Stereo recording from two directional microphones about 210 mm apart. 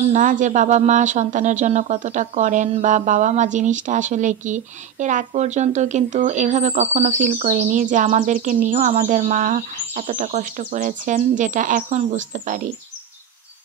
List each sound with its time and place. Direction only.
0.1 s speech: 40° right (ahead or behind)